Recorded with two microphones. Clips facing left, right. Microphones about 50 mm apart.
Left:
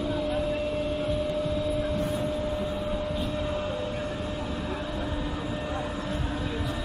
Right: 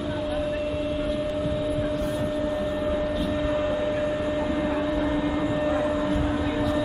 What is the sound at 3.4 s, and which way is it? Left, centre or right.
Vehicle, centre.